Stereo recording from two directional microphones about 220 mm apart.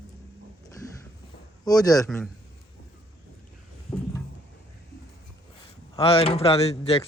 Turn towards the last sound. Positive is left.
turn(degrees=25)  # may be behind; listen again after turning